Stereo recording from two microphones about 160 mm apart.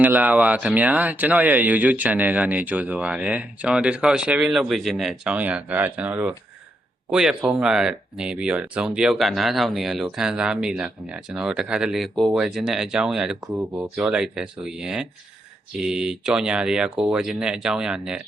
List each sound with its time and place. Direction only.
0.0 s speech: 10° right (ahead or behind)